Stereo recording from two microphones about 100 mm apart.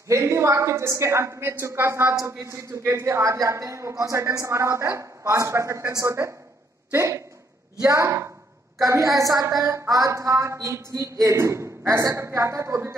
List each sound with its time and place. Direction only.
0.1 s a man's voice: 30° right (ahead or behind)